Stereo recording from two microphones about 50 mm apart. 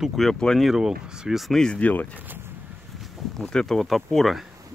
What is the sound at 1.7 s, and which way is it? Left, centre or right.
Speech, left.